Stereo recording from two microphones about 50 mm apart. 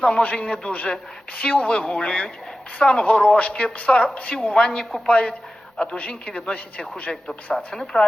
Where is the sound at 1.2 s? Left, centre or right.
Left.